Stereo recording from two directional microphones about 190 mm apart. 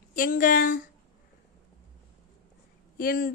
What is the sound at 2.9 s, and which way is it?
Speech, 50° left (ahead or behind).